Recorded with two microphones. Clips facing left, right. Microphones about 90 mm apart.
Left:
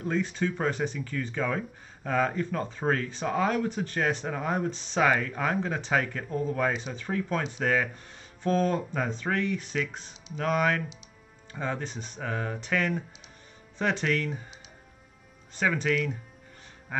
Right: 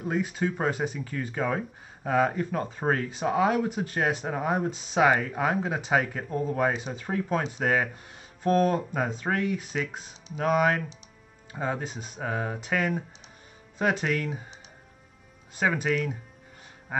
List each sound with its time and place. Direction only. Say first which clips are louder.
0.0 s speech: right 1 dB; 10° right (ahead or behind)
15.5 s speech: right 1 dB; 15° right (ahead or behind)